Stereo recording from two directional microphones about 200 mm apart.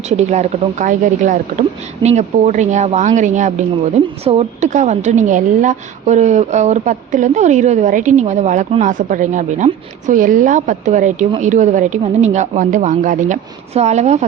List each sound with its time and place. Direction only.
0.1 s a woman's voice: 35° right (ahead or behind)